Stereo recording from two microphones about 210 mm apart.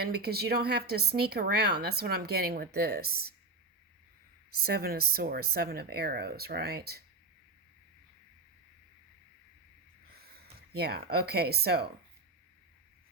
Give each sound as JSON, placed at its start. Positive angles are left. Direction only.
{"t": 0.0, "sound": "speech", "side_deg": -50}
{"t": 4.6, "sound": "speech", "side_deg": -45}
{"t": 10.8, "sound": "speech", "side_deg": -50}